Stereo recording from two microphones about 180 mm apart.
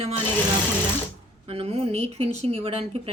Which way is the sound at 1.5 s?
35° right (ahead or behind).